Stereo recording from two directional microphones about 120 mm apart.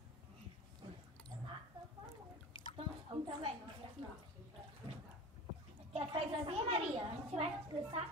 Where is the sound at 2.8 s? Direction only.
50° right (ahead or behind).